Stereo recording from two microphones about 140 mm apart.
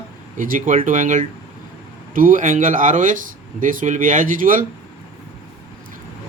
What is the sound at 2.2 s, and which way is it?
Speech, 75° right (ahead or behind).